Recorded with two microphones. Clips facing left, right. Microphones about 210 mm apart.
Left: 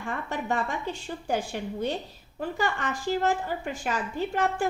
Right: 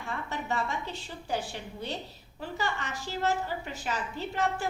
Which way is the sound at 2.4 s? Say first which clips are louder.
Left 5 dB; 50° left (ahead or behind).